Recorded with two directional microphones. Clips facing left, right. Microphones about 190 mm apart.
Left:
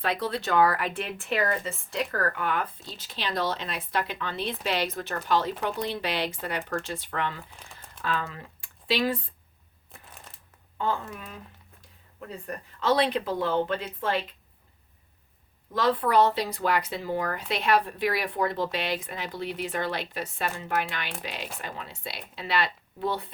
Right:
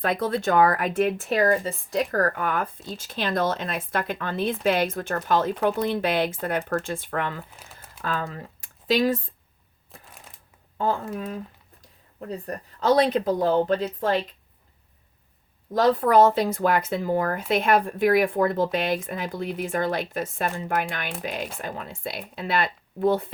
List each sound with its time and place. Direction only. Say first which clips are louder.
0.0 s speech: right 5 dB; 50° right (ahead or behind)
7.6 s crumpling: right 1 dB; 5° right (ahead or behind)
8.0 s speech: right 2 dB; 45° right (ahead or behind)
9.9 s shuffling cards: right 1 dB; centre (ahead or behind)
10.8 s speech: right 4 dB; 40° right (ahead or behind)
15.7 s speech: right 5 dB; 40° right (ahead or behind)